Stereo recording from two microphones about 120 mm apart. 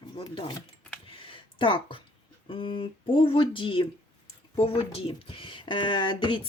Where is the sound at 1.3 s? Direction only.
45° left (ahead or behind).